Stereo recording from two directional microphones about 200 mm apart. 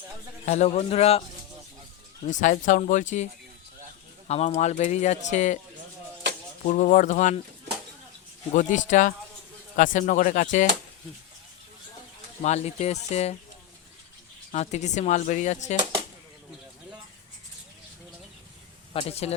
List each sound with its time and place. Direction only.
0.4 s speech: 35° left (ahead or behind)
2.2 s speech: 40° left (ahead or behind)
4.3 s speech: 30° left (ahead or behind)
6.7 s speech: 40° left (ahead or behind)
8.5 s speech: 40° left (ahead or behind)
12.4 s speech: 35° left (ahead or behind)
14.5 s speech: 35° left (ahead or behind)
18.9 s speech: 30° left (ahead or behind)